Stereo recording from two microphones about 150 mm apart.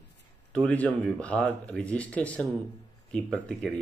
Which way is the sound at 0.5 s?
10° left (ahead or behind).